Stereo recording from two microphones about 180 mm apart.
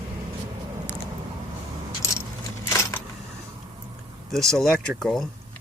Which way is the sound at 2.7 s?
15° left (ahead or behind).